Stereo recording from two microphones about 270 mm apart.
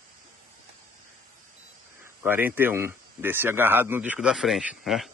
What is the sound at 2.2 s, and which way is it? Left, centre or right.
Speech, centre.